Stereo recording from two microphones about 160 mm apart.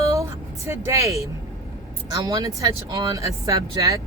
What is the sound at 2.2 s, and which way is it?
Speech, 20° right (ahead or behind).